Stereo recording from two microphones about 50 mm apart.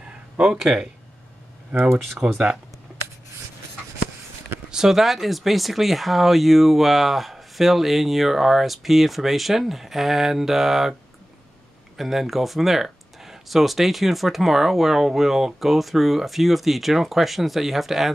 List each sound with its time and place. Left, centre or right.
0.0 s a sound: centre
0.6 s speech: centre
2.0 s speech: centre
4.6 s speech: centre
12.0 s speech: centre